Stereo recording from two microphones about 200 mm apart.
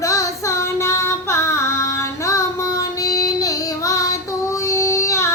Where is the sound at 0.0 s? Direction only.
15° left (ahead or behind).